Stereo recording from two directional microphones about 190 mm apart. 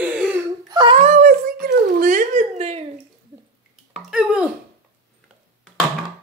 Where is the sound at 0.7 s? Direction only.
25° right (ahead or behind).